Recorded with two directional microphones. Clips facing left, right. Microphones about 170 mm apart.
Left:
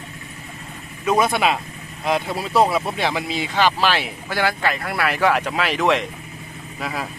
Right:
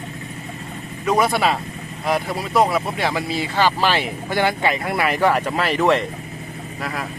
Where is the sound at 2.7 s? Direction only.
Centre (ahead or behind).